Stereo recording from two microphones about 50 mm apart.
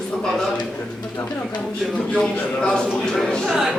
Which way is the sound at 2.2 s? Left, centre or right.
Centre.